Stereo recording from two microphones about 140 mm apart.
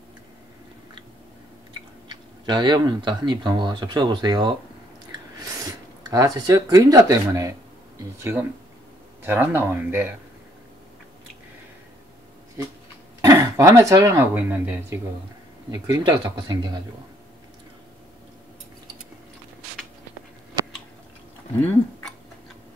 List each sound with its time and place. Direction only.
2.0 s speech: 30° right (ahead or behind); by 10.1 s 15° right (ahead or behind)
13.2 s speech: 25° right (ahead or behind)
15.7 s speech: 30° right (ahead or behind)